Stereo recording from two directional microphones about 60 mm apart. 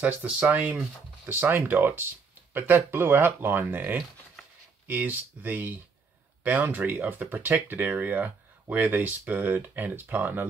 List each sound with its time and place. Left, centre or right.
0.0 s speech: right